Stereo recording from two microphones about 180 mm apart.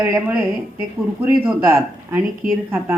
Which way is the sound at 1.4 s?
10° right (ahead or behind).